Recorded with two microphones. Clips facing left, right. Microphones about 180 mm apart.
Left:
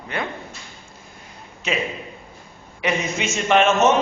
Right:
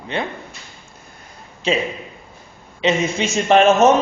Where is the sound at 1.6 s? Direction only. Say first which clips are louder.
Right 6 dB; 30° right (ahead or behind).